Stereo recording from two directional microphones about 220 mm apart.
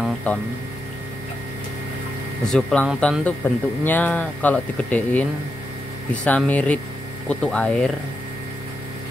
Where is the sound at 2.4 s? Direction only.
5° left (ahead or behind).